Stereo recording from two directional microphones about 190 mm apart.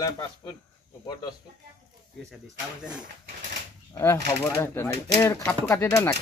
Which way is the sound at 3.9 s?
15° left (ahead or behind).